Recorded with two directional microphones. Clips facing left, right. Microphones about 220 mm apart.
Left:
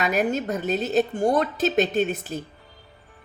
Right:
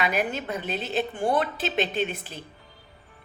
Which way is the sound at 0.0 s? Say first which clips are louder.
Left 4 dB; 45° left (ahead or behind).